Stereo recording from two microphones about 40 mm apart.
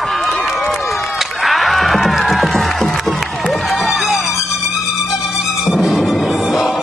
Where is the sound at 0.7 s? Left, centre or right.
Centre.